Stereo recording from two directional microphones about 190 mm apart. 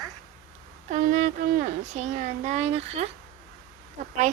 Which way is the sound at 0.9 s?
40° right (ahead or behind).